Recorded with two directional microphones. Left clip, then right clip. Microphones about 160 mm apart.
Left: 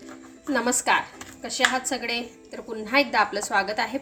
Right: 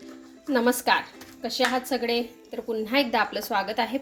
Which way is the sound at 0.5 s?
20° right (ahead or behind).